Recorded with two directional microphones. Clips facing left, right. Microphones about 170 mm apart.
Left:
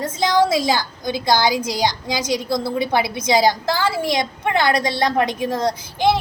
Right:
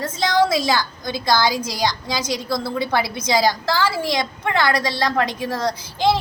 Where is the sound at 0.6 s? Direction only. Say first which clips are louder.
Left 1 dB; 15° left (ahead or behind).